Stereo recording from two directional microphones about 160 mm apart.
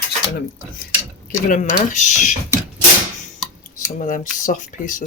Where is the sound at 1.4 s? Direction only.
55° left (ahead or behind).